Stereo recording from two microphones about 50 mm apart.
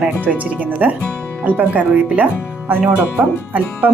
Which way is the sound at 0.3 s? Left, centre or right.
Right.